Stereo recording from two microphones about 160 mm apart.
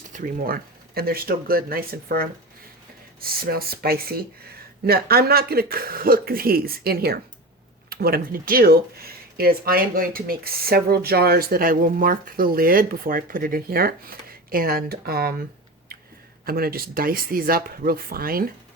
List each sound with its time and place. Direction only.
0.1 s speech: 60° right (ahead or behind)
16.5 s speech: 70° right (ahead or behind)